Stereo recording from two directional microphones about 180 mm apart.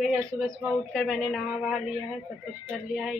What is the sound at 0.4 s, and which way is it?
A woman's voice, 5° right (ahead or behind).